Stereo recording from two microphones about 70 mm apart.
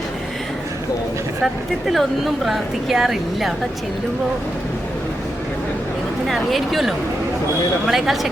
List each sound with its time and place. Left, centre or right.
1.9 s speech: centre
6.2 s speech: centre